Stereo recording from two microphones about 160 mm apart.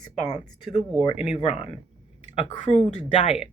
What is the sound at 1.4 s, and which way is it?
Speech, 35° left (ahead or behind).